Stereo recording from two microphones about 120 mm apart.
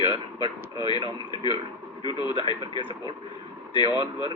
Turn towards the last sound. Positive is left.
turn(degrees=40)  # may be behind; listen again after turning